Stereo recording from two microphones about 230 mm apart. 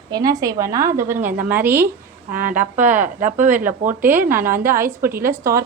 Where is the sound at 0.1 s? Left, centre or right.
Centre.